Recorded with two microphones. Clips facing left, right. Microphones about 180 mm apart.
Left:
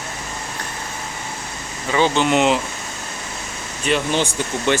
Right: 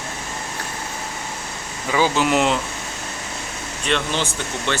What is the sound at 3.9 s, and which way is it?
Speech, 5° left (ahead or behind).